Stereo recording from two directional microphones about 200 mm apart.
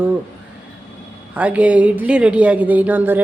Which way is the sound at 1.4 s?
5° right (ahead or behind).